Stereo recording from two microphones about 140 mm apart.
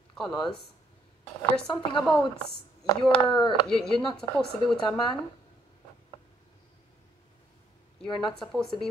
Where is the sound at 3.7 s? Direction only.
5° left (ahead or behind).